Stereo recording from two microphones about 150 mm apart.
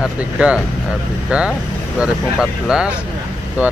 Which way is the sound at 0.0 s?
5° right (ahead or behind).